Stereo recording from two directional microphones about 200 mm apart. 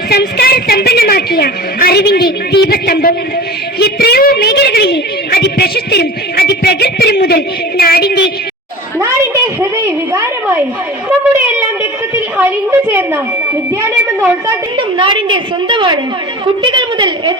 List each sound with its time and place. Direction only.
0.1 s a woman's voice: 50° left (ahead or behind)
9.0 s a sound: 15° right (ahead or behind)
10.1 s a woman's voice: 15° right (ahead or behind)
12.5 s a woman's voice: 10° right (ahead or behind)
14.2 s a woman's voice: 20° right (ahead or behind)